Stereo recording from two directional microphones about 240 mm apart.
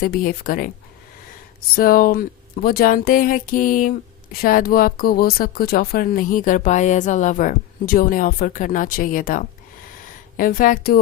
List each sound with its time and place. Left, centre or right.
0.0 s speech: left
1.7 s speech: left